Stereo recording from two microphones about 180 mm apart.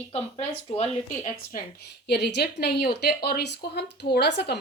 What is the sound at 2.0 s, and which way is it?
Speech, 70° left (ahead or behind).